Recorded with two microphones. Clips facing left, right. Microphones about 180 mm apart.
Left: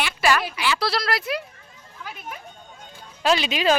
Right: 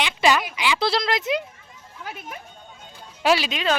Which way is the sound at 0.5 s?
15° right (ahead or behind).